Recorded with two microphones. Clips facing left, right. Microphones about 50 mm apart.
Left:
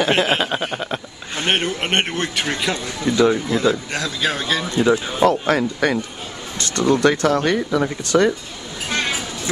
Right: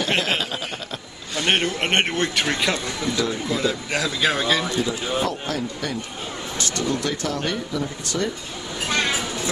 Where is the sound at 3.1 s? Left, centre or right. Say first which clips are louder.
Left 7 dB; left.